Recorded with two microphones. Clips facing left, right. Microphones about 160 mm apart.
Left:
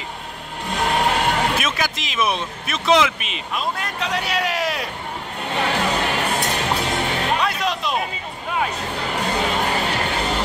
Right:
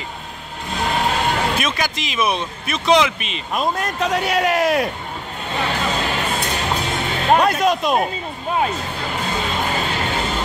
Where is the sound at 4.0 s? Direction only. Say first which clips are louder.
Right 5 dB; 50° right (ahead or behind).